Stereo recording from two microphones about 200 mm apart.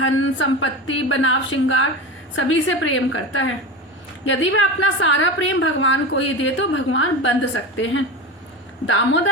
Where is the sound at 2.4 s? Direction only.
80° left.